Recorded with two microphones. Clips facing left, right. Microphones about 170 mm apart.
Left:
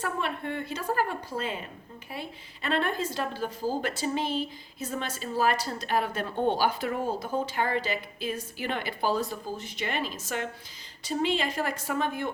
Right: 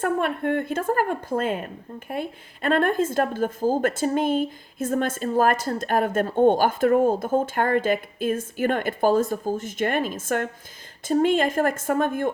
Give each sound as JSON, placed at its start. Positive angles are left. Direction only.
{"t": 0.0, "sound": "a woman's voice", "side_deg": -50}